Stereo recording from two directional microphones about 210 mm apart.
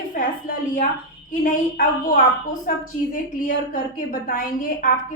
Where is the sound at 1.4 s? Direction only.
40° left (ahead or behind).